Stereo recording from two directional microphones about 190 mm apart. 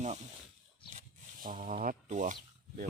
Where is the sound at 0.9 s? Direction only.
45° right (ahead or behind).